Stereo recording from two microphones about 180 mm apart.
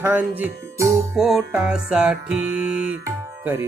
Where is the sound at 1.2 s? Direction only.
Centre (ahead or behind).